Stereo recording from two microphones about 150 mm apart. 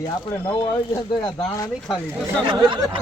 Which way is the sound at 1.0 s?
25° left (ahead or behind).